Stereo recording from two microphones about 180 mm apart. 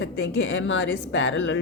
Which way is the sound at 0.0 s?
90° left.